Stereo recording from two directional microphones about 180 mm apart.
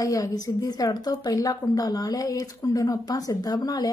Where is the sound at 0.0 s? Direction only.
20° left (ahead or behind).